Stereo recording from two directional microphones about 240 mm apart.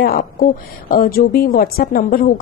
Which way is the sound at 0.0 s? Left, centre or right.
Left.